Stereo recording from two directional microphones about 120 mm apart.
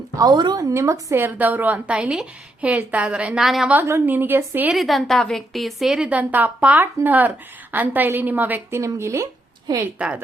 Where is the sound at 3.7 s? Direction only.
20° right (ahead or behind).